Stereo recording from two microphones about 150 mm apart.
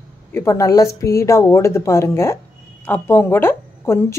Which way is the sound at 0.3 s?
20° left (ahead or behind).